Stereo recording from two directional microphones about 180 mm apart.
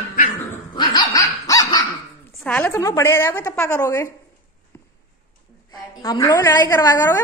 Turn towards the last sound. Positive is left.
turn(degrees=20)  # may be behind; listen again after turning